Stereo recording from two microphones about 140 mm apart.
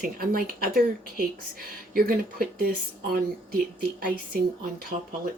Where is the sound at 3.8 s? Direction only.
90° right.